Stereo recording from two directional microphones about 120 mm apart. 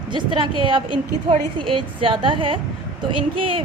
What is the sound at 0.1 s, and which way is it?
A woman's voice, 45° right (ahead or behind).